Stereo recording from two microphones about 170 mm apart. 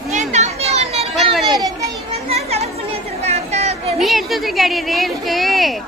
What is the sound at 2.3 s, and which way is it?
Chatter, 35° right (ahead or behind).